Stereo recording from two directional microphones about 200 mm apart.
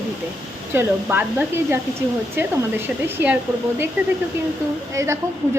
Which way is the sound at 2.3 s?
10° right (ahead or behind).